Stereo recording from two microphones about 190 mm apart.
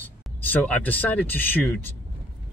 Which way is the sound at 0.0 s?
10° left (ahead or behind).